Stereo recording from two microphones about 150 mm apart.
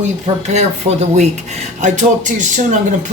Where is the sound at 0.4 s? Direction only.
50° right (ahead or behind).